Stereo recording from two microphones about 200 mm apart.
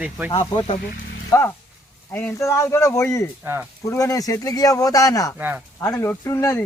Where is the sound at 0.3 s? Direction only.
25° left (ahead or behind).